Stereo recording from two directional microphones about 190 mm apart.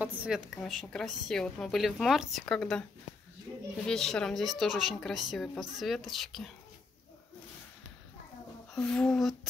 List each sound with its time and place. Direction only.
0.0 s a woman's voice: 5° right (ahead or behind)
3.8 s a woman's voice: centre (ahead or behind)
8.7 s a woman's voice: 5° left (ahead or behind)